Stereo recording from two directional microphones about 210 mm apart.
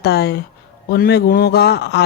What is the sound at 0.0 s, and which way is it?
A man's voice, 50° left (ahead or behind).